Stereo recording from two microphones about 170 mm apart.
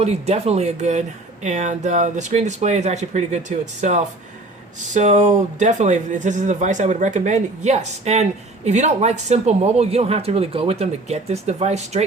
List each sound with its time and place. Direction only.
0.0 s speech: 40° right (ahead or behind)